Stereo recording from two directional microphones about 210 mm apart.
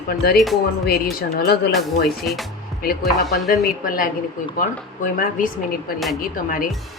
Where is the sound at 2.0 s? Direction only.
Centre (ahead or behind).